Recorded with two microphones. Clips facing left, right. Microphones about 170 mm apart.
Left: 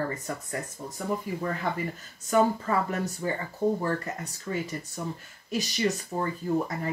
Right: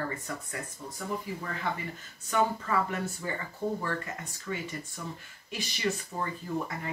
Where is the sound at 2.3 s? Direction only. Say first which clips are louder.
Left 5 dB; 40° left (ahead or behind).